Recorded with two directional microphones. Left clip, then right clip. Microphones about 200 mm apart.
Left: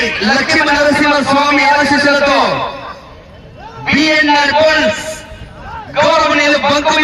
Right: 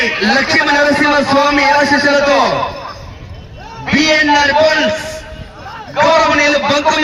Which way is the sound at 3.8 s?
45° left (ahead or behind).